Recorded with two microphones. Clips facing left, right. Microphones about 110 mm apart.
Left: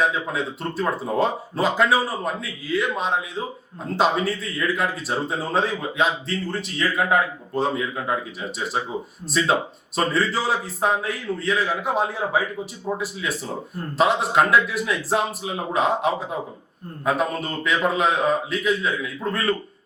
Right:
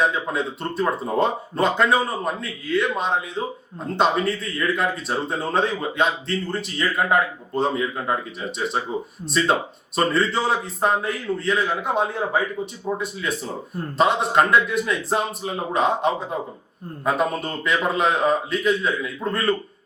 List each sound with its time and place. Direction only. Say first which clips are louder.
0.0 s speech: right 1 dB; centre (ahead or behind)